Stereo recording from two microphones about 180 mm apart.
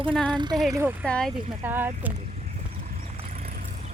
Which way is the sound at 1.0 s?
5° left (ahead or behind).